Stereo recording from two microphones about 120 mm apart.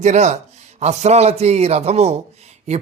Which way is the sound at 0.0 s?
75° right (ahead or behind).